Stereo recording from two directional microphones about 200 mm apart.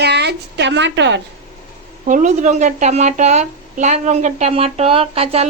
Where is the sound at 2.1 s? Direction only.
40° right (ahead or behind).